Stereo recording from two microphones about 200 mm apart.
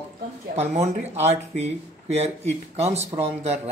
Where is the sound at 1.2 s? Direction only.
30° right (ahead or behind).